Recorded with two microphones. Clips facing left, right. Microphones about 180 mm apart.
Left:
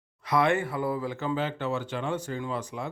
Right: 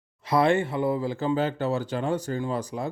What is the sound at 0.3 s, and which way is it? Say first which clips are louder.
Speech: right 3 dB; 30° right (ahead or behind).